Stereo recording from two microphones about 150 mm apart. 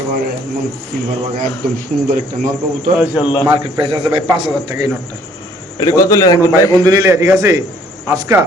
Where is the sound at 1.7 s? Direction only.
65° right (ahead or behind).